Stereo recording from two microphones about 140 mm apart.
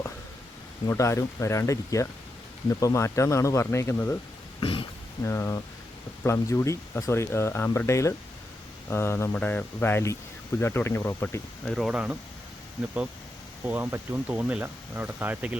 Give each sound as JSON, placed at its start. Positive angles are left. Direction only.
{"t": 0.9, "sound": "speech", "side_deg": 20}
{"t": 4.6, "sound": "a sound", "side_deg": 40}
{"t": 5.2, "sound": "speech", "side_deg": 20}
{"t": 11.6, "sound": "speech", "side_deg": 0}
{"t": 13.7, "sound": "speech", "side_deg": -15}